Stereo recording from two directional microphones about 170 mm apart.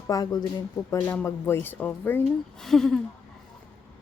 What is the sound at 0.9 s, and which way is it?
Speech, 10° left (ahead or behind).